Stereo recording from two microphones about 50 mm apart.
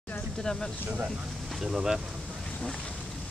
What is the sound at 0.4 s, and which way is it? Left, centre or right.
Speech, centre.